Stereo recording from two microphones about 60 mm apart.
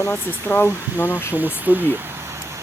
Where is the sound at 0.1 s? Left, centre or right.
Left.